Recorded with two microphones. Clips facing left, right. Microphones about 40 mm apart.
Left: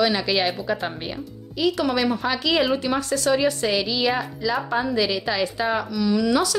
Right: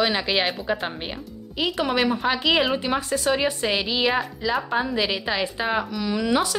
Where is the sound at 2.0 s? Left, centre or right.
Centre.